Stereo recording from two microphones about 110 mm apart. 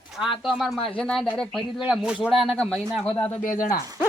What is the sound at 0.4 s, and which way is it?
Speech, centre (ahead or behind).